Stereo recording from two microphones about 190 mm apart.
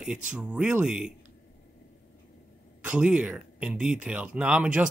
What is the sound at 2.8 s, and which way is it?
Speech, 5° right (ahead or behind).